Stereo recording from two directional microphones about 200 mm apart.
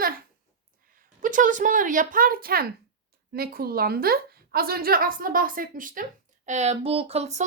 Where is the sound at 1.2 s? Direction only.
40° right (ahead or behind).